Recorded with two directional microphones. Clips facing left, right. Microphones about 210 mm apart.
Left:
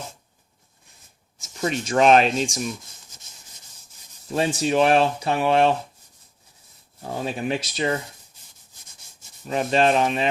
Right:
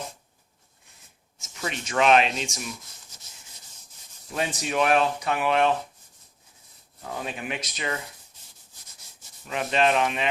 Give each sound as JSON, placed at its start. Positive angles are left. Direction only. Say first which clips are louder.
{"t": 1.6, "sound": "speech", "louder": "left 5 dB", "side_deg": 40}
{"t": 4.3, "sound": "speech", "louder": "left 7 dB", "side_deg": 30}
{"t": 7.0, "sound": "speech", "louder": "left 6 dB", "side_deg": 30}
{"t": 9.5, "sound": "speech", "louder": "left 4 dB", "side_deg": 35}